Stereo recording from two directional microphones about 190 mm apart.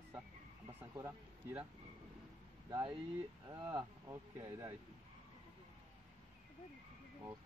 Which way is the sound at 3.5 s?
20° right (ahead or behind).